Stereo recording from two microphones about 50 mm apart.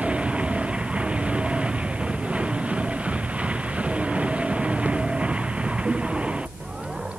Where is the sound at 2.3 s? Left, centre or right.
Right.